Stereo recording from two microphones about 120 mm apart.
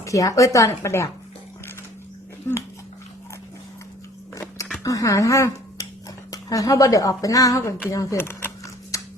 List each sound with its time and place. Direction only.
0.0 s speech: 25° left (ahead or behind)
2.5 s speech: 20° left (ahead or behind)
4.4 s a sound: 25° left (ahead or behind)
4.8 s dishes: 30° left (ahead or behind)
6.3 s speech: 30° left (ahead or behind)
7.9 s a sound: 25° left (ahead or behind)